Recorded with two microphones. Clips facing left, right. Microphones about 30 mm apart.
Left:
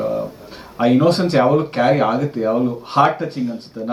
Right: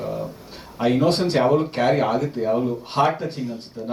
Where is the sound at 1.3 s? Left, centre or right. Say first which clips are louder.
Left 4 dB; left.